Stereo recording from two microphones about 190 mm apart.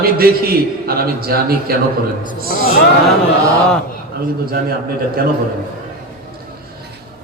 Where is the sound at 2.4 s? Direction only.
50° left (ahead or behind).